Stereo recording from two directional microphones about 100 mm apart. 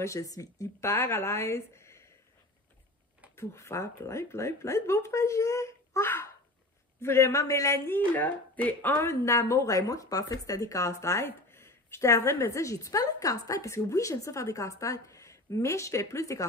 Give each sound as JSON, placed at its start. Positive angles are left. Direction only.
{"t": 0.0, "sound": "speech", "side_deg": 30}
{"t": 3.3, "sound": "speech", "side_deg": 30}